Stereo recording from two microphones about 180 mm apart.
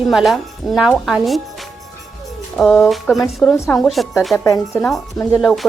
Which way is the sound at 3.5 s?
15° left (ahead or behind).